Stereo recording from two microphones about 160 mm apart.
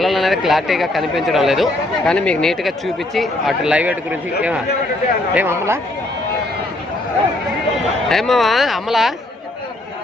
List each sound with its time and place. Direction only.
0.0 s speech: centre (ahead or behind)
5.3 s speech: 15° right (ahead or behind)
8.1 s speech: centre (ahead or behind)